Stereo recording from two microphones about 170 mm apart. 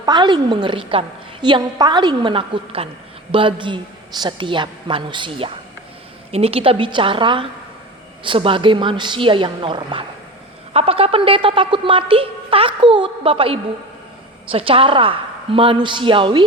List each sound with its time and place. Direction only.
0.0 s a woman's voice: 25° right (ahead or behind)